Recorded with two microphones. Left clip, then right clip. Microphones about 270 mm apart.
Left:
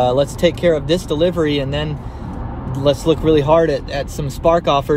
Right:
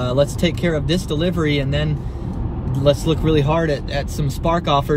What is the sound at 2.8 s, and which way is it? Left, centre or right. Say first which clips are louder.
Speech: left 3 dB; centre.